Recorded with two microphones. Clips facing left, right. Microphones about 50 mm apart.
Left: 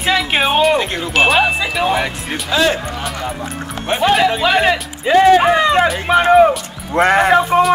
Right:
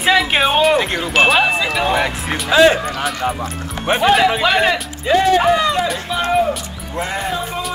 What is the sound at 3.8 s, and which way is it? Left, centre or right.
Speech, centre.